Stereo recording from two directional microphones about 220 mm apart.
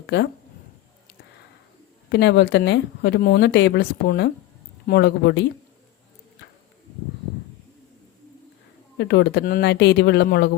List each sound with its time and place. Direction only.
0.1 s speech: 50° left (ahead or behind)
2.0 s speech: 50° left (ahead or behind)
9.0 s speech: 50° left (ahead or behind)